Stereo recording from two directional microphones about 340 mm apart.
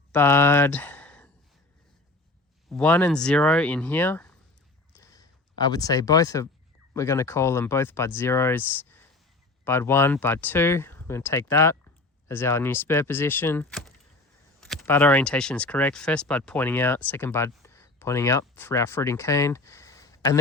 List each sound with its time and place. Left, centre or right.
0.1 s speech: centre
2.6 s speech: centre
4.9 s a sound: centre
6.9 s speech: centre